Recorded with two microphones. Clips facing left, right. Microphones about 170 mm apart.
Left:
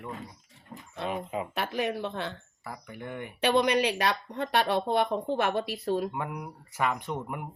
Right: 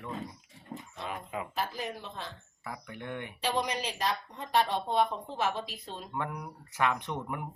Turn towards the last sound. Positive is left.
turn(degrees=5)  # may be behind; listen again after turning